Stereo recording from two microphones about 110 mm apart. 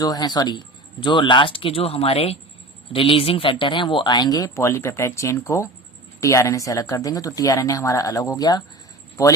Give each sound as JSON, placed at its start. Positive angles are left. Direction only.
{"t": 0.0, "sound": "speech", "side_deg": 35}